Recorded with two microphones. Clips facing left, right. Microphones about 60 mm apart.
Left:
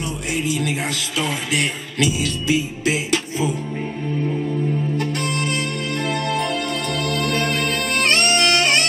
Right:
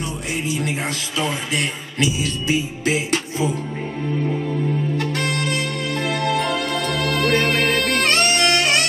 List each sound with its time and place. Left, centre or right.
0.5 s speech: right
2.2 s music: right
6.0 s music: right